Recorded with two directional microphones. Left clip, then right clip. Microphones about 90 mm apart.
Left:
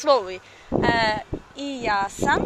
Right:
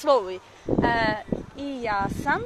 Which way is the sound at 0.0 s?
35° right (ahead or behind).